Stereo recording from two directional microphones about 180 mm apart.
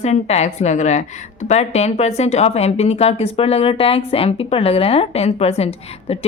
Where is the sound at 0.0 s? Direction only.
35° left (ahead or behind).